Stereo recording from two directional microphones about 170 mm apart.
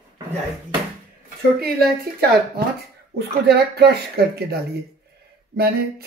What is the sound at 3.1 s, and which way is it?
Speech, 70° right (ahead or behind).